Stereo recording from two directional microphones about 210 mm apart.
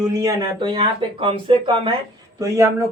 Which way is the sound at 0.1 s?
15° right (ahead or behind).